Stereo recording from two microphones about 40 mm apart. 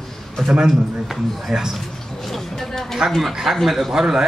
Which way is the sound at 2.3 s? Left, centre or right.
Centre.